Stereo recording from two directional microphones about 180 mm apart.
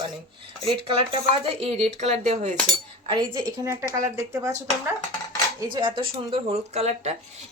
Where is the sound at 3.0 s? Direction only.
25° right (ahead or behind).